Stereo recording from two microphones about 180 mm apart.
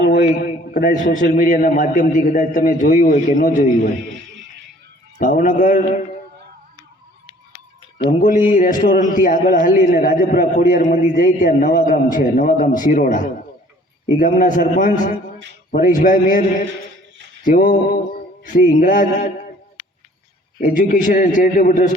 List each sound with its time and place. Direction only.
0.0 s a man's voice: 50° left (ahead or behind)
5.2 s a man's voice: 50° left (ahead or behind)
7.9 s a man's voice: 45° left (ahead or behind)
17.4 s a man's voice: 50° left (ahead or behind)
20.6 s a man's voice: 50° left (ahead or behind)